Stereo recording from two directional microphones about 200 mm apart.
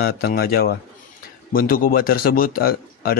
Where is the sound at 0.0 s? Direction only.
50° left (ahead or behind).